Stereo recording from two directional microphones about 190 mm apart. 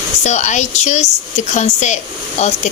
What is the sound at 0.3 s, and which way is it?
A woman's voice, 40° left (ahead or behind).